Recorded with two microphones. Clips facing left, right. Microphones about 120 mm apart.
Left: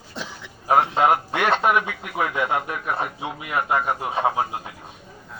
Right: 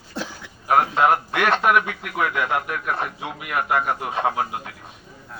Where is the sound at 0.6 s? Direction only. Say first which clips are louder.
Even; 25° left (ahead or behind).